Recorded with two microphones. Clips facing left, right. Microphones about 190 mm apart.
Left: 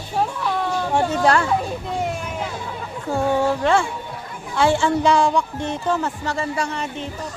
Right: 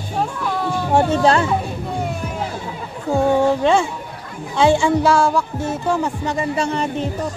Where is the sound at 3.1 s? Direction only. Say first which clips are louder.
Right 4 dB; 20° right (ahead or behind).